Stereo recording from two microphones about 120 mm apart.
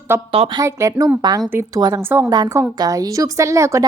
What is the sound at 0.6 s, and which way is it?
Speech, 30° right (ahead or behind).